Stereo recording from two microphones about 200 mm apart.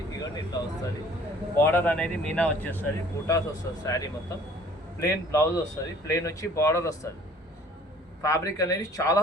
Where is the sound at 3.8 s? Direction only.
15° left (ahead or behind).